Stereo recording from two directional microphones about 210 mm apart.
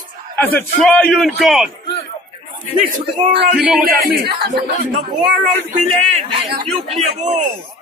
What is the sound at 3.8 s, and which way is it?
Speech, 45° right (ahead or behind).